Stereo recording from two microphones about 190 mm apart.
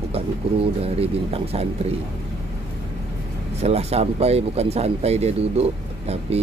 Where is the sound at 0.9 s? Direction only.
30° right (ahead or behind).